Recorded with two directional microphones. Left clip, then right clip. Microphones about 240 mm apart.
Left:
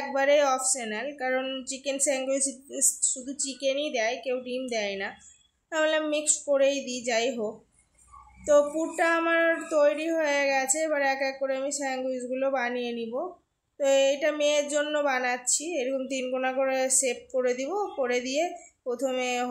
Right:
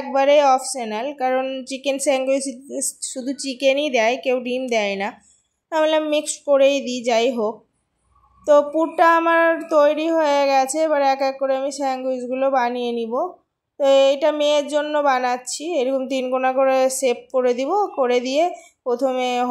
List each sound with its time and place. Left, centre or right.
0.1 s speech: centre